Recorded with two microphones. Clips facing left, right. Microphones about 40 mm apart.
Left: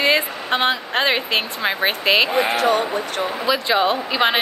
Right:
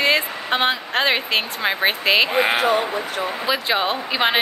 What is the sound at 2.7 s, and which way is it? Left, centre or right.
Speech, left.